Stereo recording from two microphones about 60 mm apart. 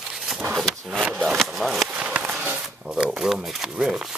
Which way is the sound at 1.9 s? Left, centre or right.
Right.